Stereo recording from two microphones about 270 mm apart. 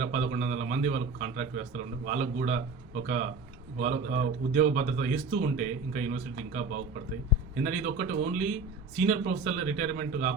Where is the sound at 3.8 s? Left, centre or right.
Right.